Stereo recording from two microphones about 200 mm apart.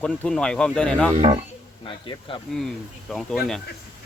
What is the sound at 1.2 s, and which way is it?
Speech, 30° right (ahead or behind).